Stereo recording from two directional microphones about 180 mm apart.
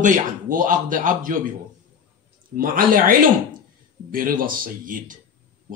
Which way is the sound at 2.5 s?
50° right (ahead or behind).